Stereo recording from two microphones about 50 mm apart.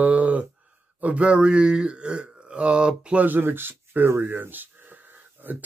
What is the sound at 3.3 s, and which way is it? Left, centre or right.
Speech, right.